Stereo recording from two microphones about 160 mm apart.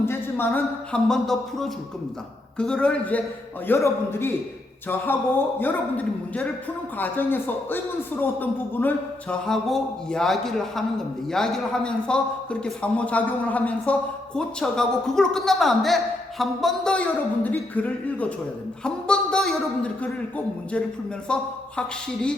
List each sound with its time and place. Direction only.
0.0 s a man's voice: 15° left (ahead or behind)
5.5 s a man's voice: 10° left (ahead or behind)